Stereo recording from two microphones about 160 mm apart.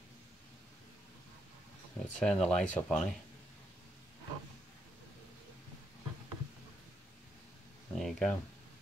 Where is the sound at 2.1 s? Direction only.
5° left (ahead or behind).